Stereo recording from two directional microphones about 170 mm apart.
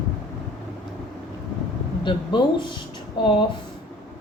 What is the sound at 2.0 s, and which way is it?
Speech, 25° left (ahead or behind).